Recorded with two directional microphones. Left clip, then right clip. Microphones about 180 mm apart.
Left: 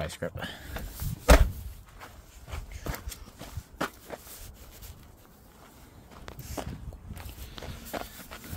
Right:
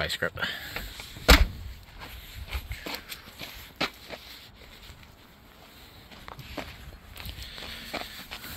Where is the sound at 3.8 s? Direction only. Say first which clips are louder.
Right 2 dB; centre (ahead or behind).